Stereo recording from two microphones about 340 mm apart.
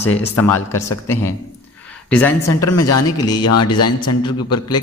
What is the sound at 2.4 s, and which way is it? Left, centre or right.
A man's voice, left.